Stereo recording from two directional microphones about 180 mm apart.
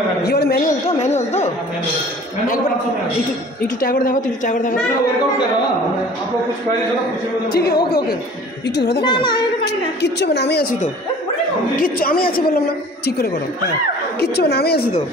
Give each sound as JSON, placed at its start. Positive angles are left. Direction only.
{"t": 0.2, "sound": "a woman's voice", "side_deg": 60}
{"t": 0.9, "sound": "speech", "side_deg": 40}
{"t": 3.8, "sound": "a woman's voice", "side_deg": 50}
{"t": 7.5, "sound": "a woman's voice", "side_deg": 60}
{"t": 9.0, "sound": "a child's voice", "side_deg": 25}
{"t": 10.0, "sound": "a woman's voice", "side_deg": 70}